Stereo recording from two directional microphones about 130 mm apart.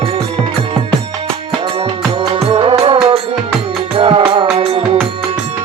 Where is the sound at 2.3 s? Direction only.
45° right (ahead or behind).